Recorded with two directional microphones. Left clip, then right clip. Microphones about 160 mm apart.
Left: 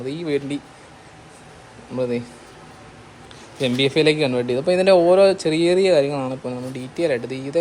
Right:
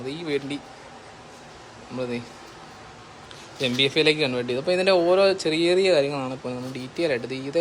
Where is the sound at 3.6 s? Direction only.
5° right (ahead or behind).